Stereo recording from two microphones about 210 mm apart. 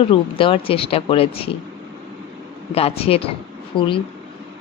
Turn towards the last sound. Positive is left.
turn(degrees=25)  # may be behind; listen again after turning